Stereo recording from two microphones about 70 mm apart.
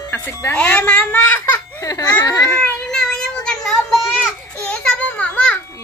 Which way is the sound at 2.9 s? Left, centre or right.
Centre.